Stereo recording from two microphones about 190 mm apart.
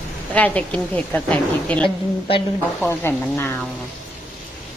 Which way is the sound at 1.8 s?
30° left (ahead or behind).